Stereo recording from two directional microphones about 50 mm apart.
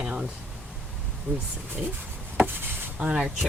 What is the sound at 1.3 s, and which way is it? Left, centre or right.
Speech, right.